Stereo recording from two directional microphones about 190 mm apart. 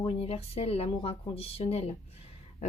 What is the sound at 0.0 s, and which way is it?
Speech, 30° left (ahead or behind).